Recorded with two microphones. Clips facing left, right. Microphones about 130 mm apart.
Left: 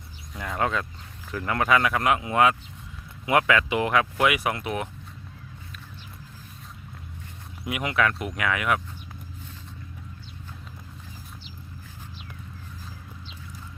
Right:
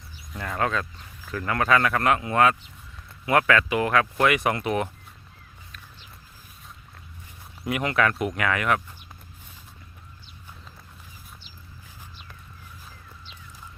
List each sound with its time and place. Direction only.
0.3 s speech: 5° left (ahead or behind)
0.6 s speech: 20° left (ahead or behind); by 4.9 s centre (ahead or behind)
7.6 s speech: 5° left (ahead or behind)